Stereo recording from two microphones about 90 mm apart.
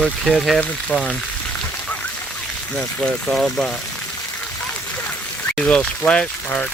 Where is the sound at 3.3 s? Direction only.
Centre (ahead or behind).